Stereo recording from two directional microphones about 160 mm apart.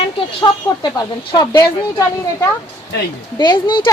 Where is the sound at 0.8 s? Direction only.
30° left (ahead or behind).